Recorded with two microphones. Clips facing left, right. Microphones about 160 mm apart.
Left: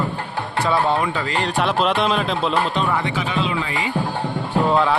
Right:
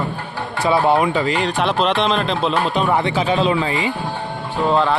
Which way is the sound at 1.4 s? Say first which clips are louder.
Right 1 dB; centre (ahead or behind).